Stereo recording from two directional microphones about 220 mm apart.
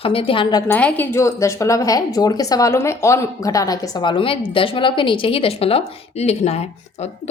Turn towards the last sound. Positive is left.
turn(degrees=30)  # may be behind; listen again after turning